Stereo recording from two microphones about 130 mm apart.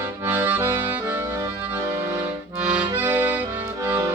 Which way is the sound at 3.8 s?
15° right (ahead or behind).